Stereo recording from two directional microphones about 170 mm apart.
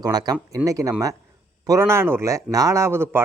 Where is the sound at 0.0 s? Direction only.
25° right (ahead or behind).